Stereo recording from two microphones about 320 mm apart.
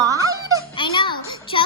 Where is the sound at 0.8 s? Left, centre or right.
Centre.